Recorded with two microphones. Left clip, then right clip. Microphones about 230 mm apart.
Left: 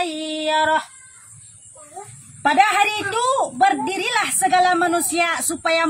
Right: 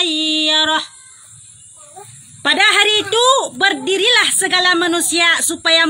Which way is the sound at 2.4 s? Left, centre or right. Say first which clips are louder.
Right 3 dB; centre.